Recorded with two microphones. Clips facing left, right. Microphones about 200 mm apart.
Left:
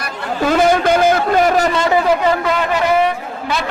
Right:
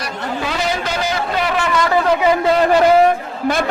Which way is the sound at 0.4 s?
50° left (ahead or behind).